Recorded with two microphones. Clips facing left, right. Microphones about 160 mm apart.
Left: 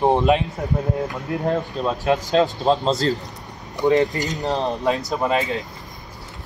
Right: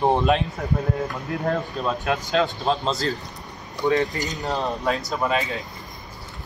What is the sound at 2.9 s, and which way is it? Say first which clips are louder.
Speech: left 5 dB; 25° left (ahead or behind).